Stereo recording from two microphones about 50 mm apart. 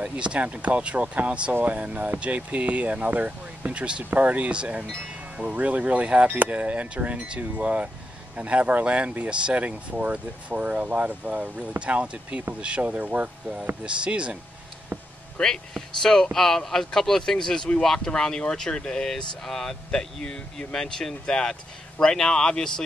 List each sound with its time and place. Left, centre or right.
0.0 s speech: right
14.9 s a sound: right
15.4 s speech: left